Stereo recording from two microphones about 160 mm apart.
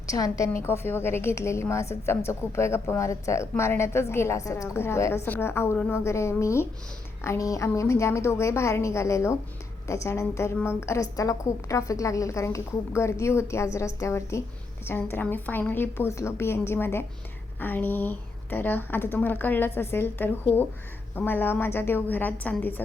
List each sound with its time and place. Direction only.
0.1 s a woman's voice: 20° left (ahead or behind)